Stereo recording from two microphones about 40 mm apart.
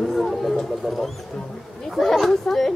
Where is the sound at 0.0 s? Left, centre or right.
Centre.